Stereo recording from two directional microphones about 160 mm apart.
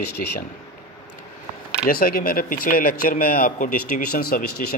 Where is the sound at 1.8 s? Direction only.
65° left (ahead or behind).